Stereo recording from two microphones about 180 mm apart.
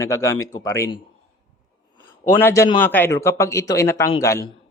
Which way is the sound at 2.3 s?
15° left (ahead or behind).